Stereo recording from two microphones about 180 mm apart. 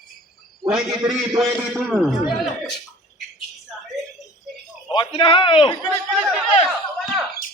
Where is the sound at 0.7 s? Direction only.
Centre (ahead or behind).